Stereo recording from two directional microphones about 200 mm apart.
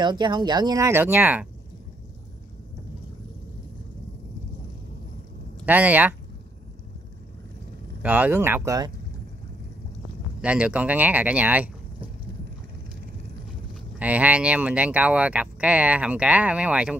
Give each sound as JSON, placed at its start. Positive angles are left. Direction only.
{"t": 0.0, "sound": "speech", "side_deg": -20}
{"t": 5.7, "sound": "speech", "side_deg": -10}
{"t": 8.0, "sound": "speech", "side_deg": -10}
{"t": 10.4, "sound": "speech", "side_deg": -5}
{"t": 13.9, "sound": "speech", "side_deg": -5}